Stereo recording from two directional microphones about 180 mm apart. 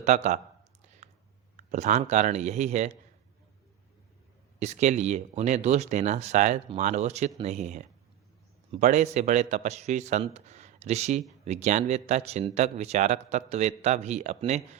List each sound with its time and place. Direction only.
0.0 s speech: 40° right (ahead or behind)
1.5 s speech: 40° right (ahead or behind)
4.6 s speech: 40° right (ahead or behind)